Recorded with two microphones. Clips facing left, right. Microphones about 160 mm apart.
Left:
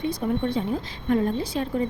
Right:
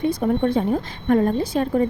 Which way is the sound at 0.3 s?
50° right (ahead or behind).